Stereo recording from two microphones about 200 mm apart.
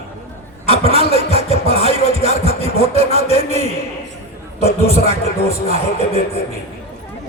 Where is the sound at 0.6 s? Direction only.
30° left (ahead or behind).